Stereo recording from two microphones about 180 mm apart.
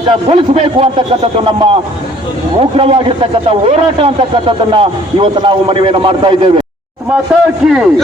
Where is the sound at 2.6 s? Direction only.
30° right (ahead or behind).